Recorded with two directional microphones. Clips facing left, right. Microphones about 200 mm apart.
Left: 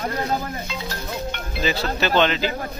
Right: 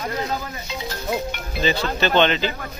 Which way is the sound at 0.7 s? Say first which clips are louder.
Right 4 dB; 20° right (ahead or behind).